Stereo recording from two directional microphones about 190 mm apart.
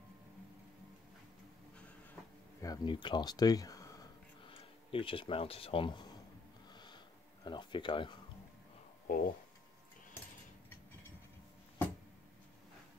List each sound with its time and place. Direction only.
2.6 s speech: 20° left (ahead or behind)
6.7 s sniff: 25° left (ahead or behind)
7.4 s speech: 25° left (ahead or behind)
9.0 s speech: 50° left (ahead or behind)